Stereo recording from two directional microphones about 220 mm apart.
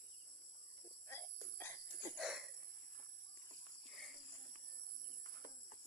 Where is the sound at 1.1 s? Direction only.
10° left (ahead or behind).